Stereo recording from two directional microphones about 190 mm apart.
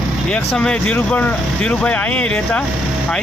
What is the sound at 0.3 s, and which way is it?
Speech, 5° left (ahead or behind).